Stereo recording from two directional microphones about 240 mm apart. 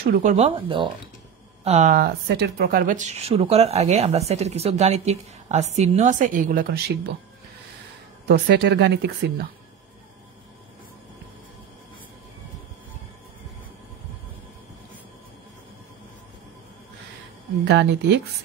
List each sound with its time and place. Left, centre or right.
0.0 s speech: right
8.3 s speech: right
17.6 s speech: right